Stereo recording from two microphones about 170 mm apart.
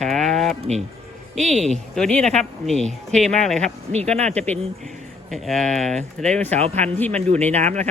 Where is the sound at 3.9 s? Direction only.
40° right (ahead or behind).